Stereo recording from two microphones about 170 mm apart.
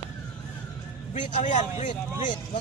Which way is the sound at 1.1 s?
45° left (ahead or behind).